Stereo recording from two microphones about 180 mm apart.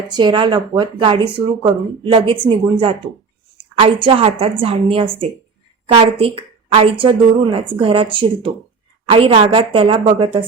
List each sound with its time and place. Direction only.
0.1 s speech: 25° right (ahead or behind)